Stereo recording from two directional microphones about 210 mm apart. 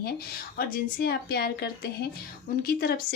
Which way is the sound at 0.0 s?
45° left (ahead or behind).